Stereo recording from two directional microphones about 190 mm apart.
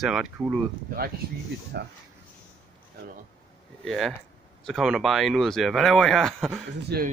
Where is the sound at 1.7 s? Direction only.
60° right (ahead or behind).